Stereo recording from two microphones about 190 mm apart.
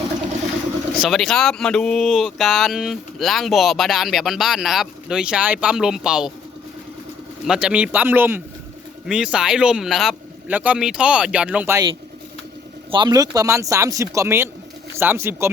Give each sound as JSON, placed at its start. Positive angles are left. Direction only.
{"t": 1.0, "sound": "speech", "side_deg": 0}
{"t": 7.4, "sound": "speech", "side_deg": -5}
{"t": 12.9, "sound": "speech", "side_deg": -25}